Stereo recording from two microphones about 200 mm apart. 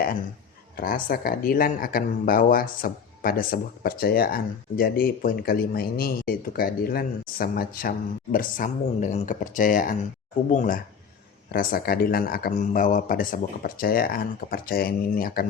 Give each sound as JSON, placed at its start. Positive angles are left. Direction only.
{"t": 0.8, "sound": "speech", "side_deg": 45}